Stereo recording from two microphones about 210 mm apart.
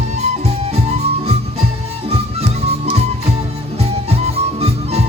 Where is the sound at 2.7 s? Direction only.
30° right (ahead or behind).